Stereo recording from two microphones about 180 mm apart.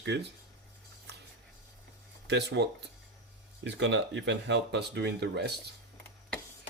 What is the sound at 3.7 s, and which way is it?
Speech, 80° right.